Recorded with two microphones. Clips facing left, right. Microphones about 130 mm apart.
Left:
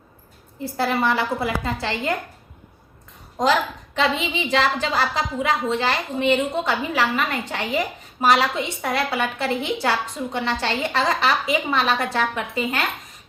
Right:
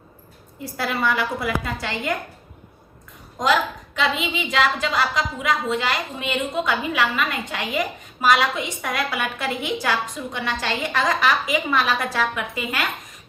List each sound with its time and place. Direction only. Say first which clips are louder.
0.6 s a woman's voice: left 3 dB; 30° left (ahead or behind)
3.3 s a woman's voice: left 1 dB; 35° left (ahead or behind)